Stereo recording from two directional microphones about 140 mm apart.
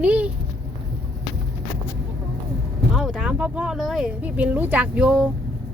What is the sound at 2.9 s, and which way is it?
Speech, centre (ahead or behind).